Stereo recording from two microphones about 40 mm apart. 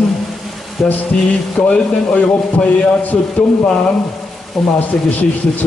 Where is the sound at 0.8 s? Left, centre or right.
Centre.